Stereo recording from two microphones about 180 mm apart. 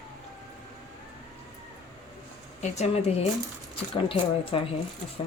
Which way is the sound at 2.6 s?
40° left (ahead or behind).